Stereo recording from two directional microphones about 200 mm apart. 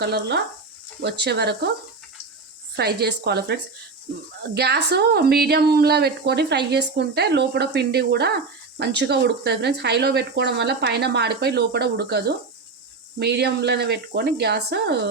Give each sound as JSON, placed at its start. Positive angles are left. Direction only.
{"t": 0.0, "sound": "speech", "side_deg": -55}
{"t": 2.7, "sound": "speech", "side_deg": -55}